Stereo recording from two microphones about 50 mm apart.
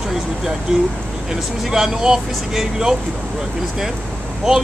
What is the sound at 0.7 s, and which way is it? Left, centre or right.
Speech, centre.